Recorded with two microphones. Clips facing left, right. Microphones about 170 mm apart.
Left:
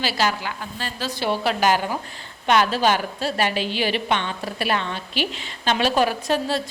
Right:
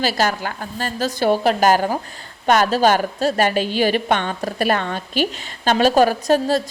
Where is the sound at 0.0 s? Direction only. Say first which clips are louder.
Right 3 dB; 45° right (ahead or behind).